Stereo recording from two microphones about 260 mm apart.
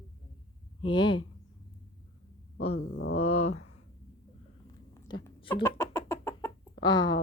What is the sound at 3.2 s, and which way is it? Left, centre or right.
Speech, left.